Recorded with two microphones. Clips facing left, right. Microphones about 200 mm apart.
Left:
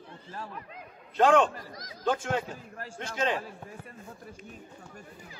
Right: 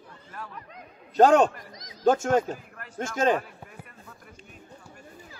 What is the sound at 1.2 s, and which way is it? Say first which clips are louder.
A man's voice: right 4 dB; 40° right (ahead or behind).